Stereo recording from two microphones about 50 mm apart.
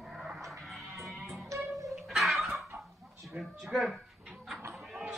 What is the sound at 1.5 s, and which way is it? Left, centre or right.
Music, right.